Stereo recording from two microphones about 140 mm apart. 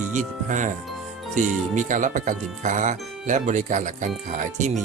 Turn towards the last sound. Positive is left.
turn(degrees=-60)  # may be behind; listen again after turning